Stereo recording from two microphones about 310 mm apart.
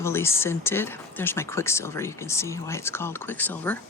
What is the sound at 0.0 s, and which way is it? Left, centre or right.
Speech, centre.